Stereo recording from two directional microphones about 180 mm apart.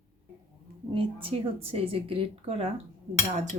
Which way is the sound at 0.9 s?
30° right (ahead or behind).